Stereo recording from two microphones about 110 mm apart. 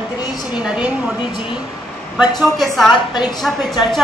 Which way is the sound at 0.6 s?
5° right (ahead or behind).